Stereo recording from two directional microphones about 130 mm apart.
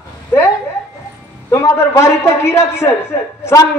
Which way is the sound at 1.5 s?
20° left (ahead or behind).